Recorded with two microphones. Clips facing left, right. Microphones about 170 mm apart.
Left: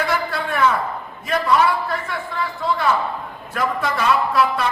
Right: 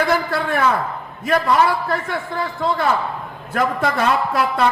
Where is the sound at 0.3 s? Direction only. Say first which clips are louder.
Right 4 dB; 55° right (ahead or behind).